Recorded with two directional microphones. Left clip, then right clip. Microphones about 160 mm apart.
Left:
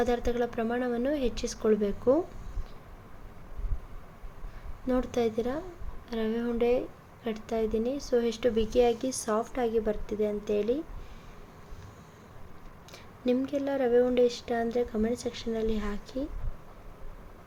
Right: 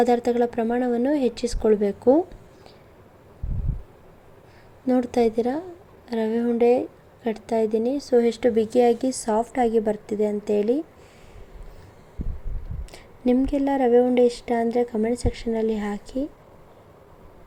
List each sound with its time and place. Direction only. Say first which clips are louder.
0.0 s a woman's voice: right 8 dB; 35° right (ahead or behind)
4.9 s a woman's voice: right 7 dB; 30° right (ahead or behind)
12.9 s a woman's voice: right 6 dB; 30° right (ahead or behind)